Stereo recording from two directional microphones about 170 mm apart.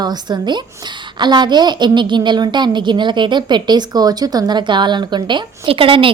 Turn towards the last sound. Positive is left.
turn(degrees=-30)  # may be behind; listen again after turning